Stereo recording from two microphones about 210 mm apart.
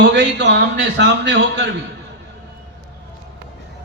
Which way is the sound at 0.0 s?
55° right (ahead or behind).